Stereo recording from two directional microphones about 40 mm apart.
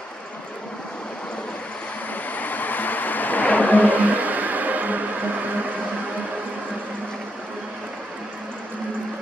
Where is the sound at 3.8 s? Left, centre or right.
Right.